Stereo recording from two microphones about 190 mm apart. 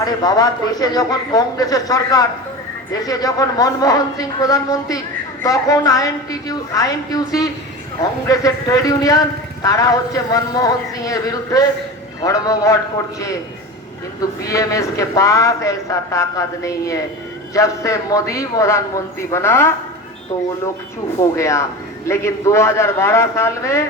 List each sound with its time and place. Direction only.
0.0 s a man's voice: 20° left (ahead or behind)
21.2 s a man's voice: 15° left (ahead or behind)